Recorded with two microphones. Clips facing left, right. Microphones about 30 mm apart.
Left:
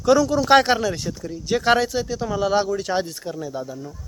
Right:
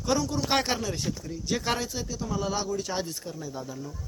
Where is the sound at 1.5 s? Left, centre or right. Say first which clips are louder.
Left 10 dB; left.